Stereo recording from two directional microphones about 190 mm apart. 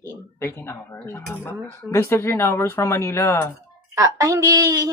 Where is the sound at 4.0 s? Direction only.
15° right (ahead or behind).